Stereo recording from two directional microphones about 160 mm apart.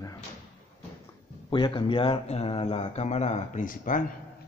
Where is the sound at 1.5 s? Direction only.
30° left (ahead or behind); by 4.0 s 55° left (ahead or behind).